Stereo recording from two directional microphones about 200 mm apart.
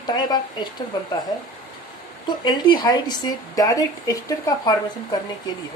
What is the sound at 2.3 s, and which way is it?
A woman's voice, 20° left (ahead or behind).